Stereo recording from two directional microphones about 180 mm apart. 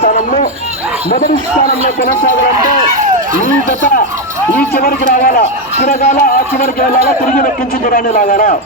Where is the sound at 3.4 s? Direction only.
50° left (ahead or behind).